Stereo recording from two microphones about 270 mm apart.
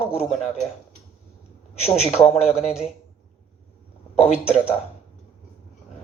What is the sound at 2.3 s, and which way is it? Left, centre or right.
Speech, centre.